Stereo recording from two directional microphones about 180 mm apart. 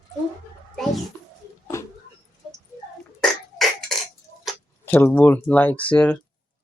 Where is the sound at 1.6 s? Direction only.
15° left (ahead or behind).